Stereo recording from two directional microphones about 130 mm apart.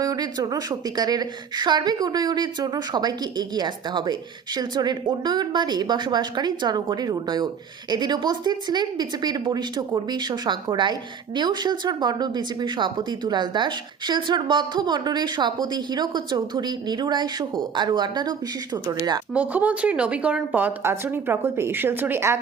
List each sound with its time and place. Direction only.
0.0 s a woman's voice: 30° right (ahead or behind)
19.3 s a woman's voice: 10° right (ahead or behind)